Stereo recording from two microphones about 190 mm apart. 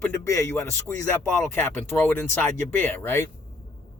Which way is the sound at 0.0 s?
15° left (ahead or behind).